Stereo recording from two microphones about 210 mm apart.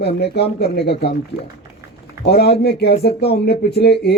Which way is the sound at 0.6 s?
50° left (ahead or behind).